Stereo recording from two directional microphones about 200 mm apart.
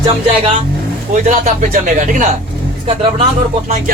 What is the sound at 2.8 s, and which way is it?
Speech, 25° right (ahead or behind).